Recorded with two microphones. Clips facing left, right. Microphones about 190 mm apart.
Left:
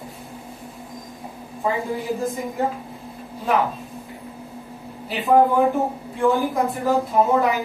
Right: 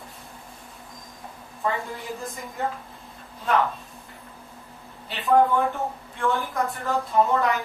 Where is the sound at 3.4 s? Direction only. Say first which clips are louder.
Left 2 dB; 5° left (ahead or behind).